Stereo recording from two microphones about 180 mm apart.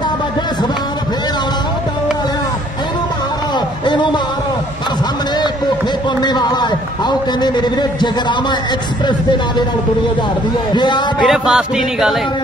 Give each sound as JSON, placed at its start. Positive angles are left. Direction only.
{"t": 3.5, "sound": "a sound", "side_deg": 25}
{"t": 6.2, "sound": "a man's voice", "side_deg": 25}
{"t": 10.7, "sound": "speech", "side_deg": 25}
{"t": 11.2, "sound": "music", "side_deg": -5}